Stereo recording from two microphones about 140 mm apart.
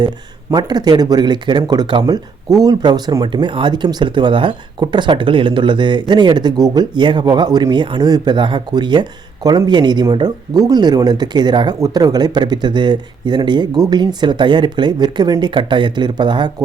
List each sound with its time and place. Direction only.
0.5 s speech: 30° right (ahead or behind)